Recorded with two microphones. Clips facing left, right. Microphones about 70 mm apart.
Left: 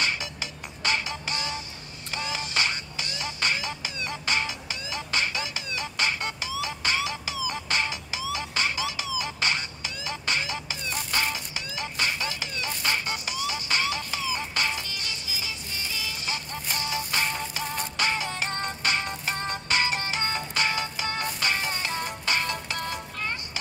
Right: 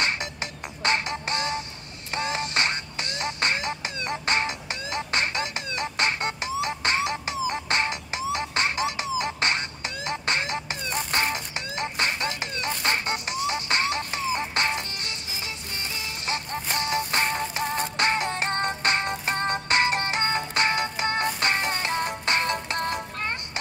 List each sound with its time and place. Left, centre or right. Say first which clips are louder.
0.0 s music: right 2 dB; right